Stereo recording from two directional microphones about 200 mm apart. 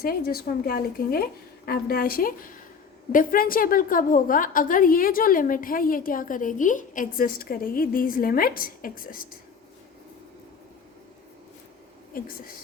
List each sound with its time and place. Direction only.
0.0 s a woman's voice: 50° left (ahead or behind)